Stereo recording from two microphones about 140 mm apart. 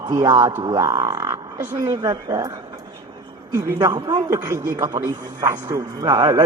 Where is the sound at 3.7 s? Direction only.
30° right (ahead or behind).